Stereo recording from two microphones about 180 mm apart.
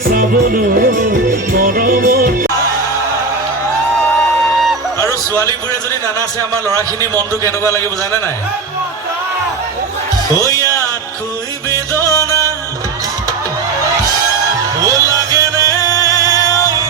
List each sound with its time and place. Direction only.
0.1 s music: 55° right (ahead or behind)
6.7 s a man's voice: 15° right (ahead or behind)
7.4 s a man's voice: 15° left (ahead or behind)
14.8 s music: 20° right (ahead or behind)
15.7 s music: 20° left (ahead or behind)
16.0 s music: 20° right (ahead or behind)